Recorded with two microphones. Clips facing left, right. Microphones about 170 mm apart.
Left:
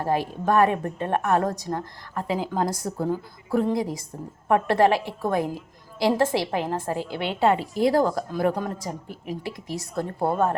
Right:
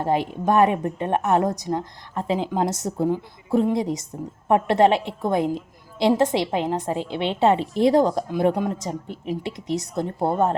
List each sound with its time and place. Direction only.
0.0 s a woman's voice: 20° right (ahead or behind)